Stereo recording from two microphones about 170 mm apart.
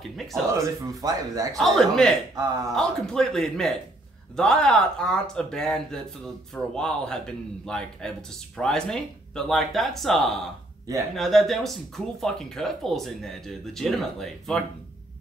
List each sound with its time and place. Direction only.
0.3 s speech: 20° right (ahead or behind)
1.6 s speech: centre (ahead or behind)